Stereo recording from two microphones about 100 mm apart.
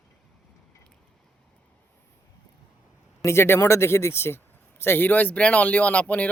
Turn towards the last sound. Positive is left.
turn(degrees=15)  # may be behind; listen again after turning